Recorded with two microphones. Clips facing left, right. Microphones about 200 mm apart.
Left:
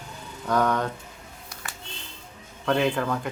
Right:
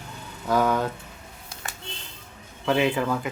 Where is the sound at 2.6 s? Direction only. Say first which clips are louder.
Right 1 dB; 5° right (ahead or behind).